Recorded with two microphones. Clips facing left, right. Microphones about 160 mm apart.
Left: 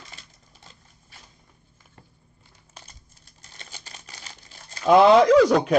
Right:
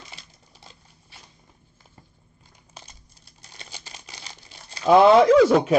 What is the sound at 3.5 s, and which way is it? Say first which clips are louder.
Crumpling: right 2 dB; 10° right (ahead or behind).